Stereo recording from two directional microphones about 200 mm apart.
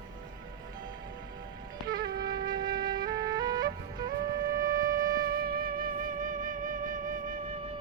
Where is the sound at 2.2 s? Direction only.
20° right (ahead or behind).